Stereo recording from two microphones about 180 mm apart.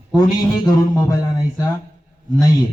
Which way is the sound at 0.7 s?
20° left (ahead or behind).